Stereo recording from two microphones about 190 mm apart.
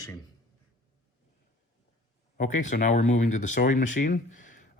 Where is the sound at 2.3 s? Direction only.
40° left (ahead or behind).